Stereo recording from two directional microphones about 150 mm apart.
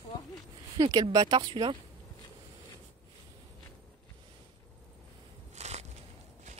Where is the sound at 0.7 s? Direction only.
25° right (ahead or behind).